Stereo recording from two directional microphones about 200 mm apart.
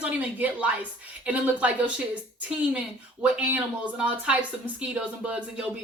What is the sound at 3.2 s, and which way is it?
A woman's voice, 5° right (ahead or behind).